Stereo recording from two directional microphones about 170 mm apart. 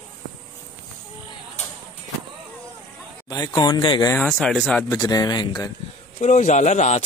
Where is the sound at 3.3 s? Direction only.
25° left (ahead or behind).